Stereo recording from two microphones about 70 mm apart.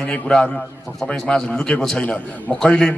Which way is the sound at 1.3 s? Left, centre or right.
Centre.